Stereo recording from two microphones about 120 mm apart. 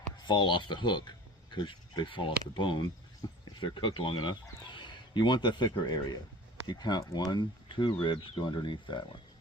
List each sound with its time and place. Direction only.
0.2 s speech: 40° left (ahead or behind)